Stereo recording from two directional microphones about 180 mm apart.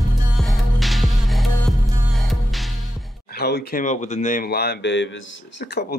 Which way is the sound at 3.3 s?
60° left (ahead or behind).